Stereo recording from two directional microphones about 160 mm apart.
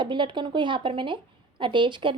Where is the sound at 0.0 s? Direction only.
30° right (ahead or behind).